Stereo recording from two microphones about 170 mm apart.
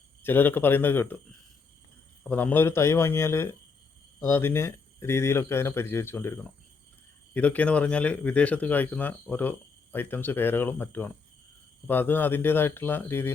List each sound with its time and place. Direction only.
0.2 s speech: 10° left (ahead or behind)
2.3 s speech: 10° left (ahead or behind)